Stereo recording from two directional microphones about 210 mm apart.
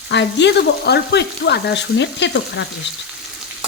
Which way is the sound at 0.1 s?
55° left (ahead or behind).